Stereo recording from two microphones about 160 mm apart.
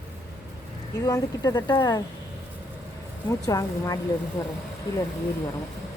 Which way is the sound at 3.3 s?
20° left (ahead or behind).